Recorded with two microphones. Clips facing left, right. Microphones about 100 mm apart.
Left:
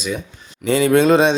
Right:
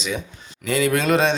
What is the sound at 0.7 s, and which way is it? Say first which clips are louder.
Speech: left 6 dB; 25° left (ahead or behind).